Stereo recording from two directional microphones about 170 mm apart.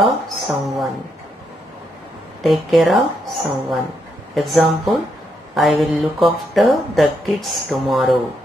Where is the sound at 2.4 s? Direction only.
Centre (ahead or behind).